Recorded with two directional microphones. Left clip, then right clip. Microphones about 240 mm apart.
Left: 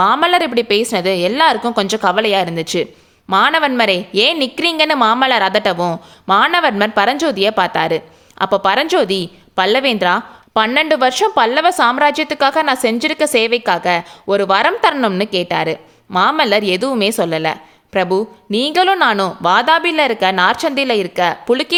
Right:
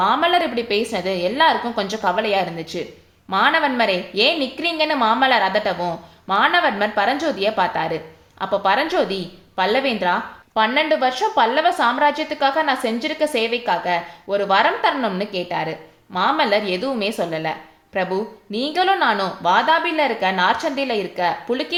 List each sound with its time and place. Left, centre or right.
0.0 s a woman's voice: left